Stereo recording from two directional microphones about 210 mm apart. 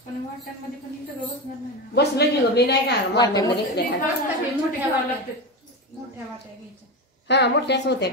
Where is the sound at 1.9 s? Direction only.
50° left (ahead or behind).